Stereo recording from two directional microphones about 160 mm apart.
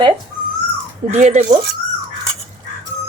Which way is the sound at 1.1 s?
45° right (ahead or behind).